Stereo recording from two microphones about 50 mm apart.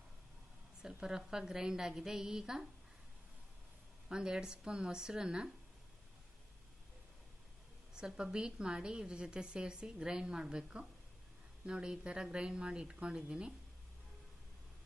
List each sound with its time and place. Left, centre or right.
1.0 s a woman's voice: centre
4.1 s a woman's voice: centre
7.9 s a woman's voice: centre